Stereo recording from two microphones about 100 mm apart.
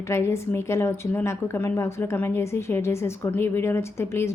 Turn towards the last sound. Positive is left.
turn(degrees=25)  # may be behind; listen again after turning